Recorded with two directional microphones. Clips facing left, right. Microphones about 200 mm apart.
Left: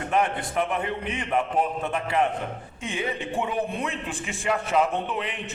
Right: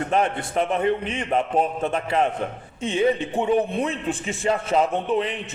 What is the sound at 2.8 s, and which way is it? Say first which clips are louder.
A man's voice: right 9 dB; 25° right (ahead or behind).